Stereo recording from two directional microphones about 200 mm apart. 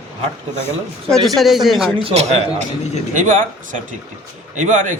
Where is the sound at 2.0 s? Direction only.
35° right (ahead or behind).